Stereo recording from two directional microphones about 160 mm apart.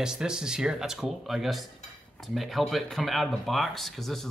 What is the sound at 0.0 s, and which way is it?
Speech, 5° right (ahead or behind).